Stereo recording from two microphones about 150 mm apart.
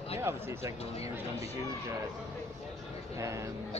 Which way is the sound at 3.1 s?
20° right (ahead or behind).